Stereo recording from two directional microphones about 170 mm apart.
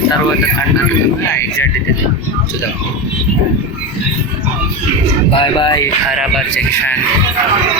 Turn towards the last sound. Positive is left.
turn(degrees=5)  # may be behind; listen again after turning